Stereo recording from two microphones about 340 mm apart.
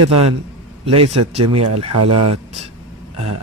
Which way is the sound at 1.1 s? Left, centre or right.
Centre.